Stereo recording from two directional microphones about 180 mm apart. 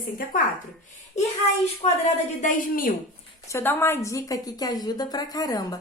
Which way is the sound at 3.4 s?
10° left (ahead or behind).